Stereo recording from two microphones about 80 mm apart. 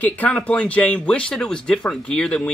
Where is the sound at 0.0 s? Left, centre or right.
Centre.